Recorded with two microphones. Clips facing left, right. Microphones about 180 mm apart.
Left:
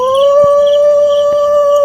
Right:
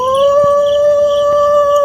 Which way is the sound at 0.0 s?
Centre (ahead or behind).